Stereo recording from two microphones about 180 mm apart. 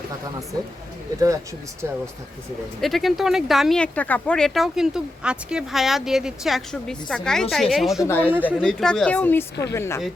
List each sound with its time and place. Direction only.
2.8 s speech: centre (ahead or behind)
7.9 s speech: 15° left (ahead or behind)
8.2 s speech: 10° right (ahead or behind)
8.4 s speech: 5° left (ahead or behind)